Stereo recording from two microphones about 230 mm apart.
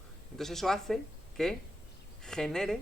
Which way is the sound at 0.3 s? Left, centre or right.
Centre.